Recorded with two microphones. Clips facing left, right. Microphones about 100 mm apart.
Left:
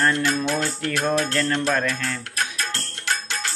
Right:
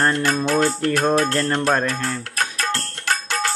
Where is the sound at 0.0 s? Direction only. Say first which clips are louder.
Right 2 dB; 45° right (ahead or behind).